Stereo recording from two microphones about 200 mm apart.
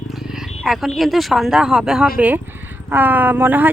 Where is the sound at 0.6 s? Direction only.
Centre (ahead or behind).